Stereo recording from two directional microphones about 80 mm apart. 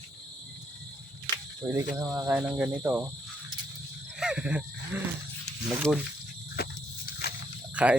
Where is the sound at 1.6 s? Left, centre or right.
Right.